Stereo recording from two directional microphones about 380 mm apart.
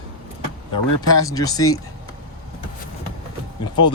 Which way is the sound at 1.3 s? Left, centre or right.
Centre.